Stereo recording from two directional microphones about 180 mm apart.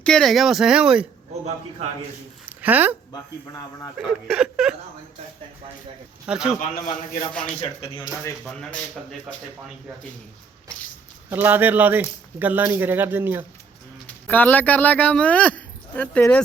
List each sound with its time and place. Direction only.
0.0 s speech: 5° left (ahead or behind)
2.5 s a sound: 10° right (ahead or behind)
3.9 s speech: 5° right (ahead or behind)
6.2 s speech: 5° right (ahead or behind)
6.6 s a man's voice: 50° left (ahead or behind)
7.6 s speech: 25° left (ahead or behind)
11.3 s speech: 10° right (ahead or behind)
14.3 s speech: 10° left (ahead or behind)